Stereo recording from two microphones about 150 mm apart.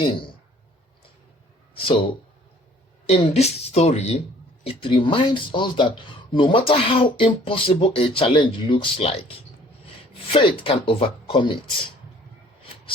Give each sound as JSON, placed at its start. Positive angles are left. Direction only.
{"t": 0.0, "sound": "speech", "side_deg": 35}
{"t": 1.7, "sound": "speech", "side_deg": 35}
{"t": 3.1, "sound": "speech", "side_deg": 45}
{"t": 10.3, "sound": "speech", "side_deg": 35}